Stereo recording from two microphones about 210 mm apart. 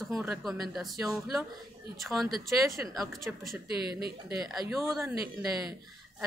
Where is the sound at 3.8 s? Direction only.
50° right (ahead or behind).